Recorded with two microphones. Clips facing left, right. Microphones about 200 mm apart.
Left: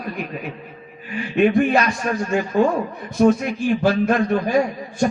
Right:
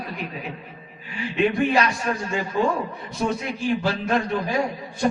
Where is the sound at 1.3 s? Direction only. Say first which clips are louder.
Left 4 dB; 50° left (ahead or behind).